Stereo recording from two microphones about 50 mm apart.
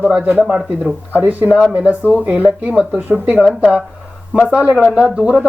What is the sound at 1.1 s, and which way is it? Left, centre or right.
Speech, right.